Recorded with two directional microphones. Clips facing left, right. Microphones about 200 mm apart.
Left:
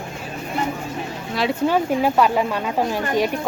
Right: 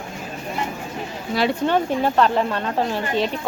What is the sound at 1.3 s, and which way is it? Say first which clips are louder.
Speech: even; centre (ahead or behind).